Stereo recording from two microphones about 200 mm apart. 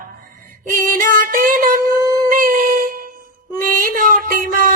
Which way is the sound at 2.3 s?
45° right (ahead or behind).